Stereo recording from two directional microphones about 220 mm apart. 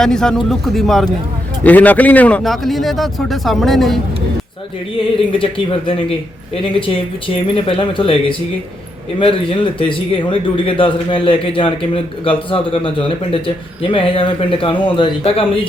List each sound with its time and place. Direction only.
0.0 s a man's voice: 5° left (ahead or behind)
5.3 s a man's voice: 25° left (ahead or behind)